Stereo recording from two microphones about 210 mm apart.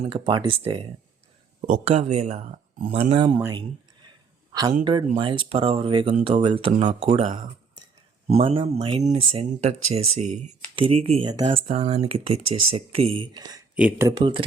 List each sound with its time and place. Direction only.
0.0 s speech: 25° right (ahead or behind)
8.3 s speech: 30° right (ahead or behind)
13.7 s speech: 5° right (ahead or behind)
14.1 s speech: 20° right (ahead or behind)